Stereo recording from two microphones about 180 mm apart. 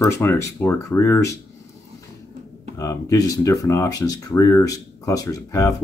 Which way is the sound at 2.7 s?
15° left (ahead or behind).